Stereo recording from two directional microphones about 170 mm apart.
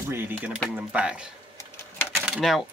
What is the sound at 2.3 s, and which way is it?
Speech, centre (ahead or behind).